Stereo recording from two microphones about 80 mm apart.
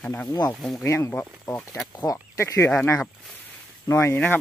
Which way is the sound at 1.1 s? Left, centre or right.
Left.